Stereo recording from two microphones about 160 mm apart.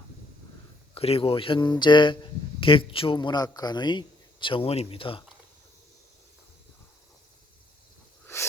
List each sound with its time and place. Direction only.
0.9 s a man's voice: 35° left (ahead or behind)